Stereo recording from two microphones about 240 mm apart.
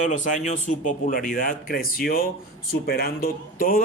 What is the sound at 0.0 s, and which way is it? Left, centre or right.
A man's voice, left.